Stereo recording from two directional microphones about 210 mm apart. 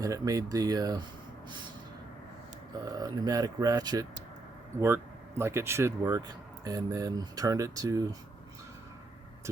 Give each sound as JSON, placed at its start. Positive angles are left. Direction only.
{"t": 0.0, "sound": "speech", "side_deg": -15}
{"t": 2.8, "sound": "speech", "side_deg": -15}
{"t": 5.4, "sound": "speech", "side_deg": -10}